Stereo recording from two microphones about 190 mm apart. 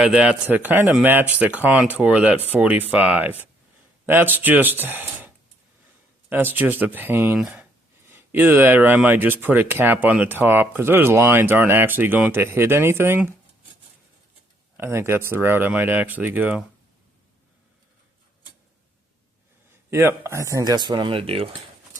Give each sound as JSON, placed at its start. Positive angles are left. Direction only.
{"t": 0.0, "sound": "speech", "side_deg": -5}
{"t": 6.3, "sound": "speech", "side_deg": -10}
{"t": 14.8, "sound": "speech", "side_deg": -10}
{"t": 19.9, "sound": "speech", "side_deg": -15}